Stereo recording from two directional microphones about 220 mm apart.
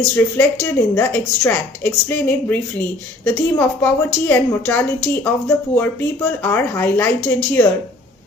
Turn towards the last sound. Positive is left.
turn(degrees=5)  # may be behind; listen again after turning